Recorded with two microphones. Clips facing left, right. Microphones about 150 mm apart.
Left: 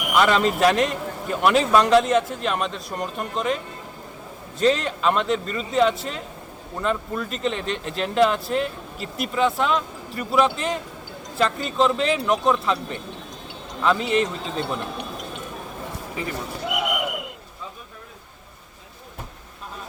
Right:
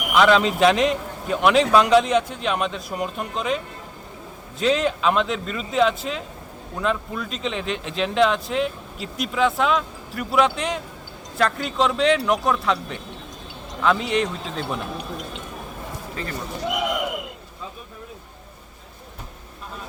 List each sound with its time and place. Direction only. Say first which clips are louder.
0.1 s speech: right 2 dB; 5° left (ahead or behind)
4.6 s speech: even; centre (ahead or behind)
16.2 s speech: left 2 dB; 15° left (ahead or behind)